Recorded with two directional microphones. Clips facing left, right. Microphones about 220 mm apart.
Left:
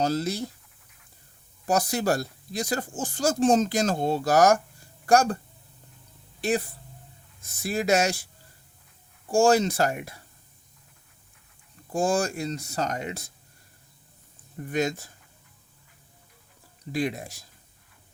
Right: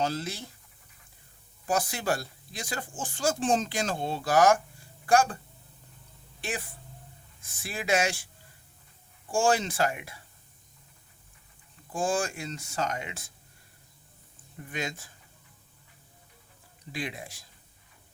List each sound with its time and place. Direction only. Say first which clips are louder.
0.0 s speech: left 5 dB; 40° left (ahead or behind)
1.6 s speech: left 5 dB; 40° left (ahead or behind)
6.4 s speech: left 10 dB; 40° left (ahead or behind)
9.3 s speech: left 6 dB; 40° left (ahead or behind)
11.9 s speech: left 4 dB; 40° left (ahead or behind)
14.6 s speech: left 9 dB; 40° left (ahead or behind)
16.9 s speech: left 8 dB; 40° left (ahead or behind)